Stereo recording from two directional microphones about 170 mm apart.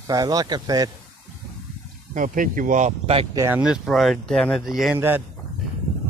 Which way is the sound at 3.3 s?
15° right (ahead or behind).